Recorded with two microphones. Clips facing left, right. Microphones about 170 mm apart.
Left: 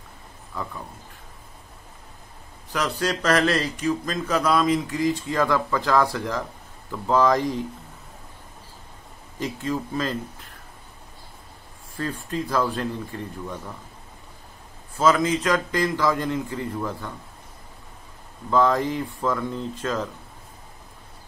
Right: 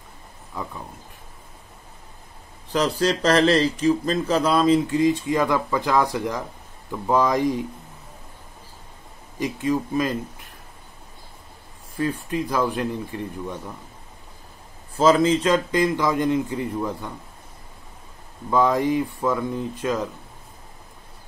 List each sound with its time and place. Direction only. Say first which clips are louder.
0.5 s speech: even; 20° right (ahead or behind)
2.7 s speech: right 4 dB; 30° right (ahead or behind); by 7.6 s 15° right (ahead or behind)
9.4 s speech: right 4 dB; 15° right (ahead or behind)
12.0 s speech: right 4 dB; 15° right (ahead or behind)
15.0 s speech: right 3 dB; 30° right (ahead or behind)
18.5 s speech: right 1 dB; 15° right (ahead or behind)